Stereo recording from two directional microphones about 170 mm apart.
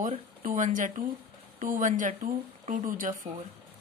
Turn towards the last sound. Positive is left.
turn(degrees=-50)  # may be behind; listen again after turning